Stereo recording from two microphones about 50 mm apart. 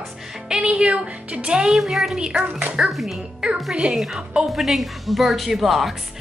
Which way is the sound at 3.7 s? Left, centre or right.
Centre.